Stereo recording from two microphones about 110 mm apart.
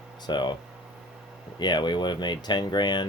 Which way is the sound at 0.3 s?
40° left (ahead or behind).